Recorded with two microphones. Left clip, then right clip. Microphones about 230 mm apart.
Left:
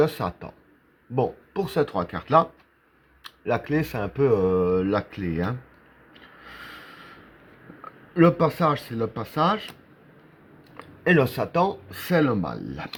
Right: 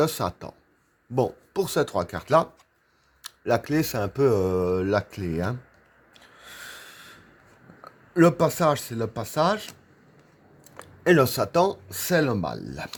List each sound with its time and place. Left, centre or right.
0.0 s speech: right
8.1 s speech: right
10.8 s speech: right